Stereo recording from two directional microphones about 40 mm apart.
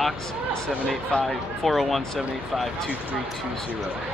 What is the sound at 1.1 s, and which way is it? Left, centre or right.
Speech, left.